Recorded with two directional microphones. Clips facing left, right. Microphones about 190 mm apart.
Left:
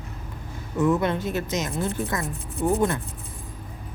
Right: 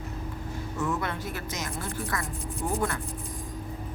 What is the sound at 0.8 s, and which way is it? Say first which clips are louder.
Speech: left 9 dB; 20° left (ahead or behind).